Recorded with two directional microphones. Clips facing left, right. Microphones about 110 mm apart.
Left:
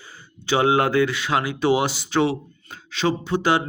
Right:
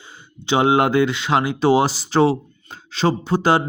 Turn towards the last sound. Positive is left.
turn(degrees=-35)  # may be behind; listen again after turning